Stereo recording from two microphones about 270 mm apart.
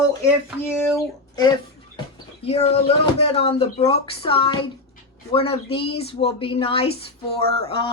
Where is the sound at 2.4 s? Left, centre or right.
Left.